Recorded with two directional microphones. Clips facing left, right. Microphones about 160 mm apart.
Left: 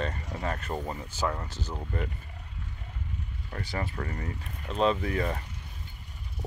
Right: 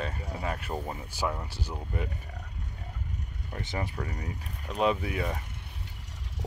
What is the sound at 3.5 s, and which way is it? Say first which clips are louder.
Speech: even; 15° right (ahead or behind).